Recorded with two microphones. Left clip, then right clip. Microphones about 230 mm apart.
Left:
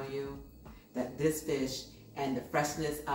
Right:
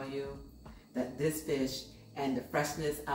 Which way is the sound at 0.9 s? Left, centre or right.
Centre.